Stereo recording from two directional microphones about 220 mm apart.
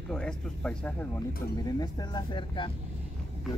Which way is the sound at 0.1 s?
5° left (ahead or behind).